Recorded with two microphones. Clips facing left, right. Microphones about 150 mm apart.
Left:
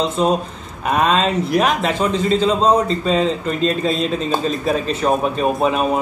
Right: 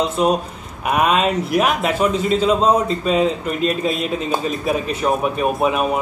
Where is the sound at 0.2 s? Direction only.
10° right (ahead or behind).